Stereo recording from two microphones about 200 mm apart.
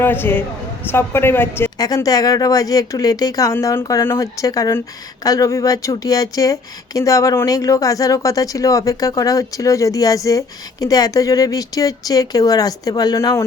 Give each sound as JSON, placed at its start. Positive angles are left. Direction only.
{"t": 0.0, "sound": "speech", "side_deg": 10}